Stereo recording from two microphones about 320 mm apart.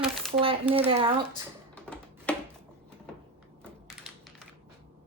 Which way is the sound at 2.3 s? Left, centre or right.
Centre.